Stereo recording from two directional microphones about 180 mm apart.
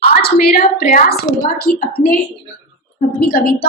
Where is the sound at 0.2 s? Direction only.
60° left (ahead or behind).